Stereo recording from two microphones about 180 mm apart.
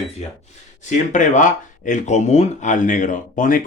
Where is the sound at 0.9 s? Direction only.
40° left (ahead or behind).